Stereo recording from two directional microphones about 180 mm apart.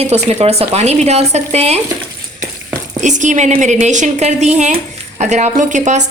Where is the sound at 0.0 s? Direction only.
35° right (ahead or behind).